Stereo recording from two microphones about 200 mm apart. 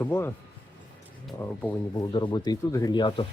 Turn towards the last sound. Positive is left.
turn(degrees=25)  # may be behind; listen again after turning